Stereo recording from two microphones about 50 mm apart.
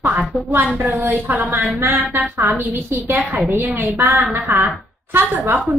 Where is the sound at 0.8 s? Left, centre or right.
Right.